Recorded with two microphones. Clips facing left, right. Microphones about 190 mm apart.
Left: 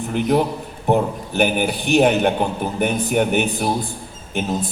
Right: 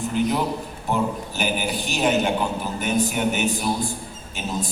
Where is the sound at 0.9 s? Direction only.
60° left (ahead or behind).